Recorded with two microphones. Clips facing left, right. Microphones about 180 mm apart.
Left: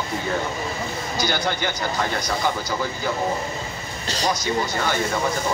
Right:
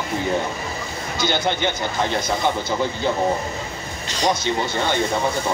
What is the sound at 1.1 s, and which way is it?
Speech, 25° right (ahead or behind).